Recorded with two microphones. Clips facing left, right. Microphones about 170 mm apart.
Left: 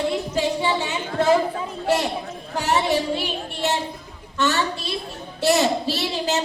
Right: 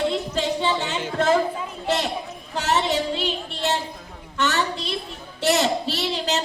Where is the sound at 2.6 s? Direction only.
15° left (ahead or behind).